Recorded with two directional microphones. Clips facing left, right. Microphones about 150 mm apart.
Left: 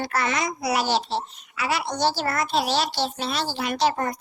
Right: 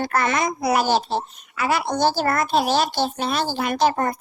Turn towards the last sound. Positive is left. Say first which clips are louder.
# right 3 dB
turn(degrees=-50)  # may be behind; listen again after turning